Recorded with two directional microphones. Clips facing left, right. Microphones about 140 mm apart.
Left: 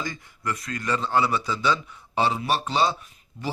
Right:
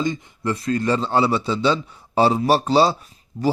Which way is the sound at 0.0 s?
25° right (ahead or behind).